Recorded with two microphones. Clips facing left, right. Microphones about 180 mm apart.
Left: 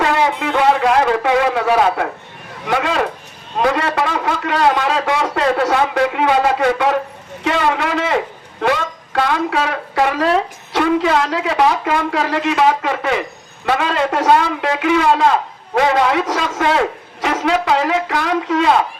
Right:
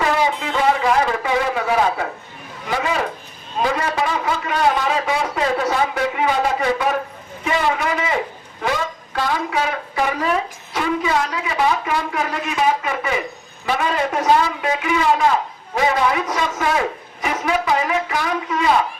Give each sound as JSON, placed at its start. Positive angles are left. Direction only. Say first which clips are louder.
{"t": 0.0, "sound": "a woman's voice", "louder": "left 3 dB", "side_deg": 65}